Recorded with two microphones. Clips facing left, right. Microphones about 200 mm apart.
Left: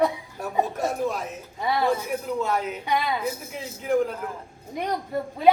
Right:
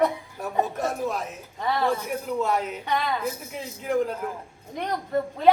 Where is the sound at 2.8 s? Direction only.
10° left (ahead or behind).